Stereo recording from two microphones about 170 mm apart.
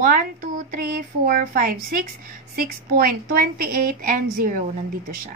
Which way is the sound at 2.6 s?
60° right (ahead or behind).